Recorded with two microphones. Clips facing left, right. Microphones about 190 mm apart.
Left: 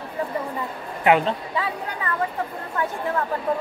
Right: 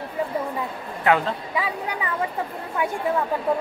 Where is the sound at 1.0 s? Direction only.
20° left (ahead or behind).